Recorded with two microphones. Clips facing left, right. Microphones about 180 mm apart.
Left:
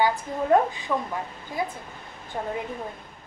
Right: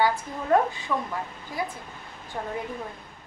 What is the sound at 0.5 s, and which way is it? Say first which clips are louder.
Speech: left 1 dB; 20° left (ahead or behind).